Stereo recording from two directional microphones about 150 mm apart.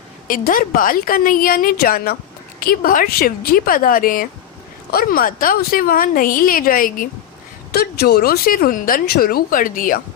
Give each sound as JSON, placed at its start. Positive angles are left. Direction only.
{"t": 0.3, "sound": "a woman's voice", "side_deg": 70}
{"t": 4.9, "sound": "a woman's voice", "side_deg": 80}
{"t": 7.7, "sound": "speech", "side_deg": 90}